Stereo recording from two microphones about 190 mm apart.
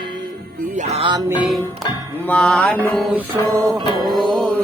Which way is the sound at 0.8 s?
35° right (ahead or behind).